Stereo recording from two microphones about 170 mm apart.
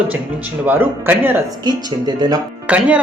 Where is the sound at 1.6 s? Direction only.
25° right (ahead or behind).